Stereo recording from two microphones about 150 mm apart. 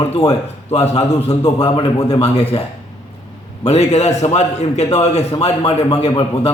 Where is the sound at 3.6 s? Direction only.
45° left (ahead or behind).